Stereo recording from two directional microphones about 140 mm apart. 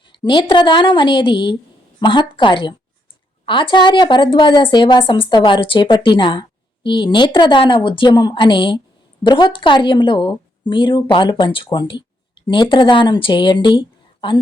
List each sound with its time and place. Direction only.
0.2 s a woman's voice: 35° left (ahead or behind)